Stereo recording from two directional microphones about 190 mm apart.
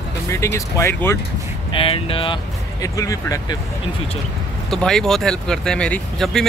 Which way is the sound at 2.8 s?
15° left (ahead or behind).